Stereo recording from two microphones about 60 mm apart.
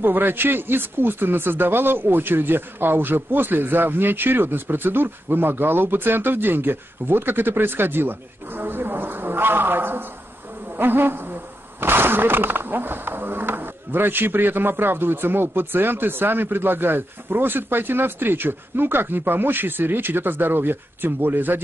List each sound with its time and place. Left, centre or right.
0.0 s speech: right
10.8 s insect: right
11.8 s speech: right